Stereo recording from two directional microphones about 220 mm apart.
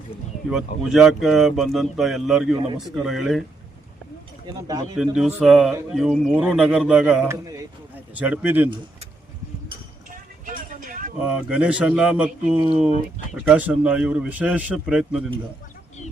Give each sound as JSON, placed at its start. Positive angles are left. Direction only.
{"t": 0.4, "sound": "speech", "side_deg": 0}
{"t": 5.1, "sound": "speech", "side_deg": 0}
{"t": 10.4, "sound": "vehicle", "side_deg": -35}
{"t": 11.2, "sound": "speech", "side_deg": -5}